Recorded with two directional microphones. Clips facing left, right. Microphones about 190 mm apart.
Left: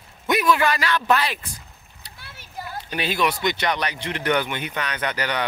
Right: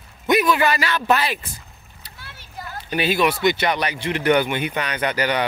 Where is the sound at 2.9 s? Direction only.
5° right (ahead or behind).